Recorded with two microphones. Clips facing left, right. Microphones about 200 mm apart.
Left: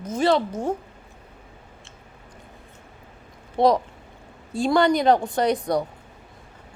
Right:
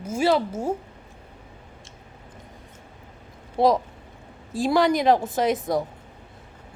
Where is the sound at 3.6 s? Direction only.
5° right (ahead or behind).